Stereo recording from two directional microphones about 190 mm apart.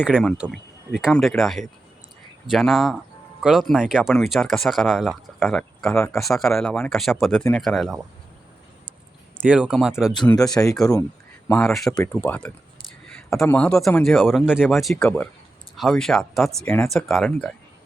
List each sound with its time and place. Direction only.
0.0 s speech: centre (ahead or behind)
9.5 s speech: 5° right (ahead or behind)
10.3 s speech: 20° left (ahead or behind)
11.4 s speech: 5° left (ahead or behind)
13.5 s speech: 5° left (ahead or behind)